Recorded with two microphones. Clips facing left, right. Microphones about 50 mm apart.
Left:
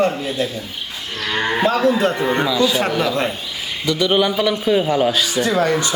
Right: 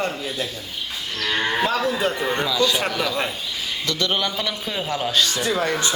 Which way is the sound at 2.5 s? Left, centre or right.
Centre.